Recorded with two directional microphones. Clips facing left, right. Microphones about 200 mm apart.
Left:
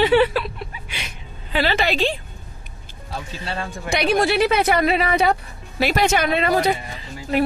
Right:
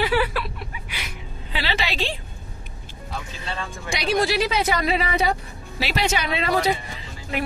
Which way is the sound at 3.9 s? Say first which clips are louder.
Left 3 dB; 60° left (ahead or behind).